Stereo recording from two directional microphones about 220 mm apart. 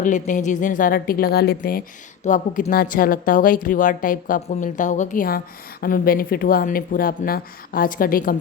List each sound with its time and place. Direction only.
0.0 s a woman's voice: 35° left (ahead or behind)